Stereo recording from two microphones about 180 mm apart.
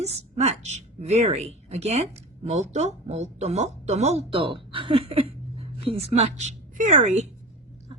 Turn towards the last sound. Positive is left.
turn(degrees=-40)  # may be behind; listen again after turning